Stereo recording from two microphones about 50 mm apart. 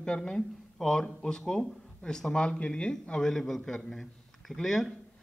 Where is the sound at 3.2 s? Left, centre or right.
Centre.